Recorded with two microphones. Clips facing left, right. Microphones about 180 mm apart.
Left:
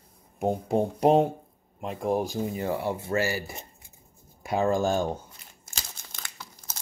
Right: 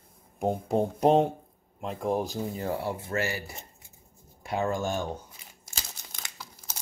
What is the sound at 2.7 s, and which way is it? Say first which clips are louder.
Speech: left 3 dB; 25° left (ahead or behind).